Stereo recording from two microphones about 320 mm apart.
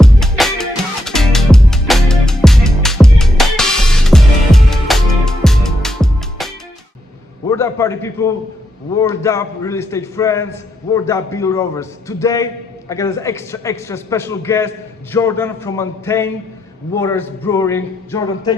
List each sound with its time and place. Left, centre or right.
0.0 s music: centre
7.4 s a man's voice: centre